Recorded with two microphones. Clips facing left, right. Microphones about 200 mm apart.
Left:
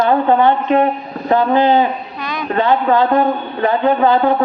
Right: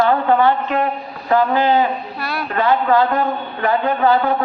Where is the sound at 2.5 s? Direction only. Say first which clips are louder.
Left 2 dB; 25° left (ahead or behind).